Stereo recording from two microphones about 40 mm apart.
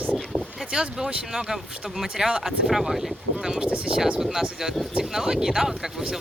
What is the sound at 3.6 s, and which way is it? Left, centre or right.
Speech, right.